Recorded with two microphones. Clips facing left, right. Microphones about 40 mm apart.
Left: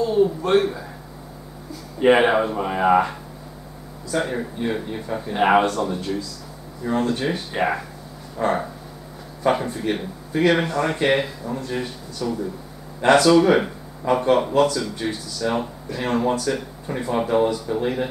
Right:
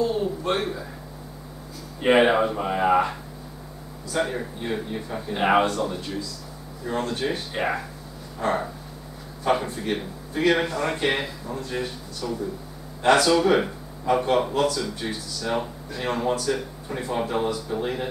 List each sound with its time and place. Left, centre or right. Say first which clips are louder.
0.5 s speech: left 6 dB; centre
2.0 s speech: left 2 dB; centre